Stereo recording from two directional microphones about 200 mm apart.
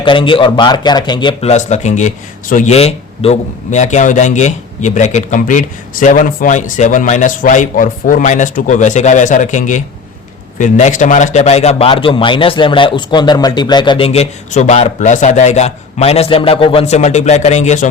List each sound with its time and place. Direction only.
0.0 s speech: 25° left (ahead or behind)